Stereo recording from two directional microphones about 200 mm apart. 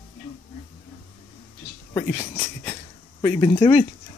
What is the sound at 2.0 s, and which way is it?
Speech, 10° left (ahead or behind).